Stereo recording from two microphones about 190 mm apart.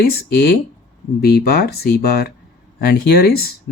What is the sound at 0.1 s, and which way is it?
Speech, 55° left (ahead or behind).